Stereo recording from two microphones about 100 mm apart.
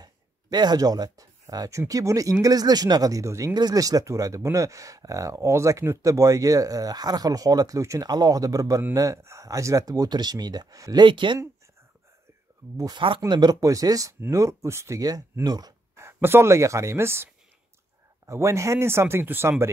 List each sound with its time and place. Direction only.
0.0 s speech: 45° right (ahead or behind)
11.1 s speech: 55° right (ahead or behind)
12.7 s speech: 40° right (ahead or behind)
16.0 s speech: 25° right (ahead or behind)